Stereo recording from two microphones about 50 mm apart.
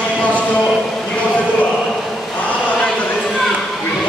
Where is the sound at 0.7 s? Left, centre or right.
Centre.